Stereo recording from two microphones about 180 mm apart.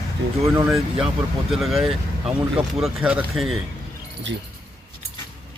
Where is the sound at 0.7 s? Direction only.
Centre (ahead or behind).